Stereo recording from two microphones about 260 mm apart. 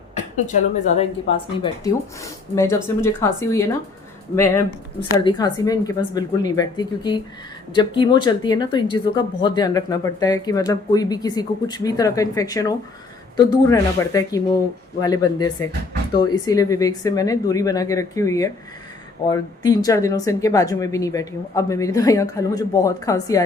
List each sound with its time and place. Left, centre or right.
0.4 s speech: left
4.9 s speech: centre